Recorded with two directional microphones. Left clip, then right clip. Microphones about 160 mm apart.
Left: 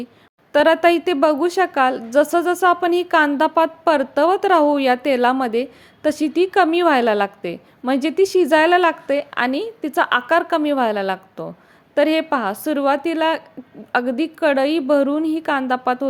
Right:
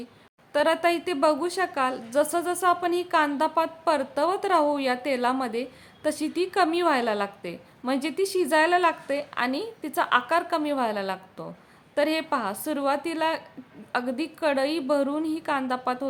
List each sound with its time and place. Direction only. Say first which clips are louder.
0.5 s a woman's voice: left 9 dB; 35° left (ahead or behind)